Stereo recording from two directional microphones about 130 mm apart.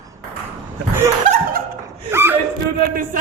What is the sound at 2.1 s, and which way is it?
Gasp, 15° right (ahead or behind).